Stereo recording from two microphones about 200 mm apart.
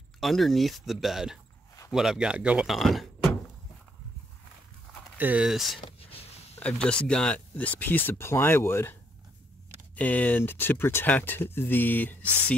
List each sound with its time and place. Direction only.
0.2 s speech: centre (ahead or behind)
5.1 s speech: 10° right (ahead or behind)
5.9 s whispering: 30° left (ahead or behind)
6.5 s speech: 5° left (ahead or behind)
9.9 s speech: 5° left (ahead or behind)